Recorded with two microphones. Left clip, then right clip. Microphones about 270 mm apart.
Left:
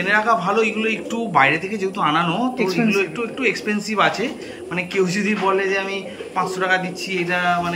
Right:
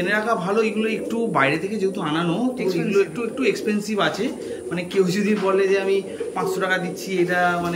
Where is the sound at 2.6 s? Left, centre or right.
Left.